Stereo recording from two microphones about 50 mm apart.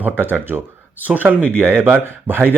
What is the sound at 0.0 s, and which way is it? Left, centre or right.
A man's voice, right.